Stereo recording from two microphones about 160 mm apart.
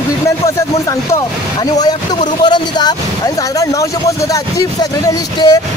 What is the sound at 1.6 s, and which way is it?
Speech, 25° left (ahead or behind).